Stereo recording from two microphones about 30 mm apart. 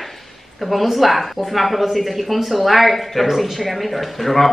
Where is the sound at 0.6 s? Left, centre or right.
Centre.